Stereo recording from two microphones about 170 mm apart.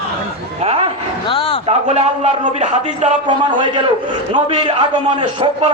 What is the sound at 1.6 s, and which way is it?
A man's voice, 40° right (ahead or behind).